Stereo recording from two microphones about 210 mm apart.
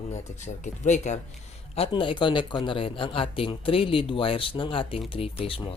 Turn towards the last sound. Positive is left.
turn(degrees=25)  # may be behind; listen again after turning